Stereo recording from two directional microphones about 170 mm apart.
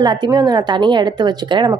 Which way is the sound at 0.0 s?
25° right (ahead or behind).